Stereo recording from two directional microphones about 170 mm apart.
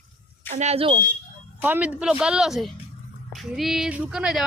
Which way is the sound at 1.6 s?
10° right (ahead or behind).